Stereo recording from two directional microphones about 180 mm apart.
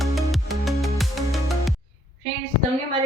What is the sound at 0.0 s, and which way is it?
Music, centre (ahead or behind).